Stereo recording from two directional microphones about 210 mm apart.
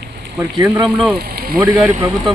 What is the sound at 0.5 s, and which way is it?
Speech, 25° right (ahead or behind).